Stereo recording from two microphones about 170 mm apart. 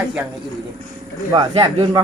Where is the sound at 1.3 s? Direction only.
25° right (ahead or behind).